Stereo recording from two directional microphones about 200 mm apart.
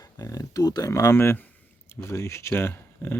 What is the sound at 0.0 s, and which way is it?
Speech, 20° left (ahead or behind).